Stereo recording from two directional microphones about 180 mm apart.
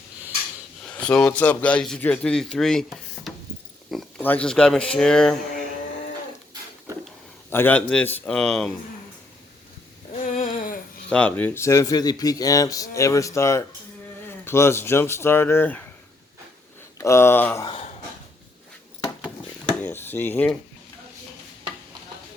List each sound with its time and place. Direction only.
0.9 s speech: 5° left (ahead or behind)
7.5 s speech: 10° left (ahead or behind)
10.1 s a sound: 40° left (ahead or behind)
11.1 s speech: 5° left (ahead or behind)
17.0 s speech: 15° left (ahead or behind)
19.8 s dishes: 10° left (ahead or behind)